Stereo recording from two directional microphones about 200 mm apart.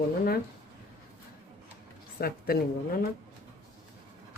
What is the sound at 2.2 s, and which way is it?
Speech, 50° left (ahead or behind).